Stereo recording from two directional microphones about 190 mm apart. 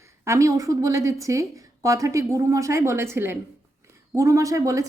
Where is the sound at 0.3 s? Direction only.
15° right (ahead or behind).